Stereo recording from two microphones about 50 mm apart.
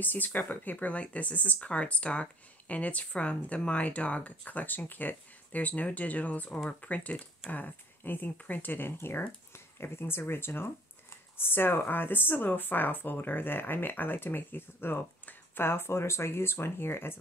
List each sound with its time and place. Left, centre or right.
0.0 s speech: left